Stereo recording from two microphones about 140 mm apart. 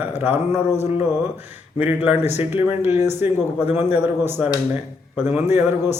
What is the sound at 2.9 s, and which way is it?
Speech, 55° left (ahead or behind).